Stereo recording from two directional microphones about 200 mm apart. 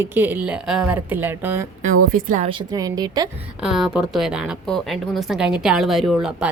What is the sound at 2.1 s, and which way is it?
Speech, 40° right (ahead or behind).